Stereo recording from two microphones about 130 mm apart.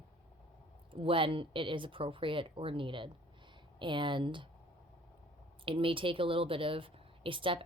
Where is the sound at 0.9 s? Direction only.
45° right (ahead or behind).